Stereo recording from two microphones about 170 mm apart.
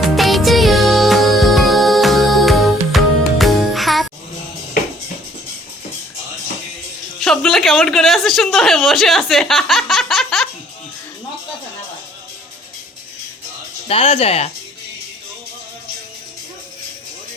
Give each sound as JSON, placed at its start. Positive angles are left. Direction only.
{"t": 0.0, "sound": "music", "side_deg": 0}
{"t": 7.2, "sound": "speech", "side_deg": 5}
{"t": 13.8, "sound": "speech", "side_deg": 35}